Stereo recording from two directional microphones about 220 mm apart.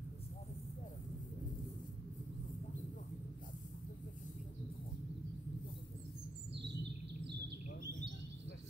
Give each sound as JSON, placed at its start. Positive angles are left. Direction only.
{"t": 6.5, "sound": "bird vocalization", "side_deg": -50}